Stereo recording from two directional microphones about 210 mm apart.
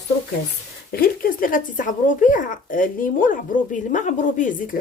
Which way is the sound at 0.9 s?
45° left (ahead or behind).